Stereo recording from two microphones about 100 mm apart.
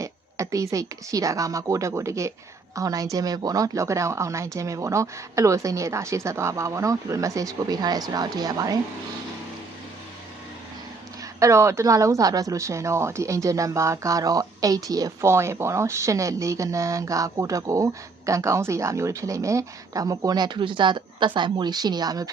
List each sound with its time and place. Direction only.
0.0 s a woman's voice: 35° right (ahead or behind)
11.3 s a woman's voice: 30° right (ahead or behind)